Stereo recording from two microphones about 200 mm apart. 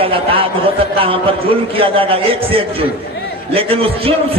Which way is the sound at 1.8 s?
25° right (ahead or behind).